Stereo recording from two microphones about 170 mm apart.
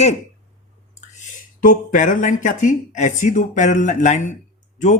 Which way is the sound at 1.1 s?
50° left (ahead or behind).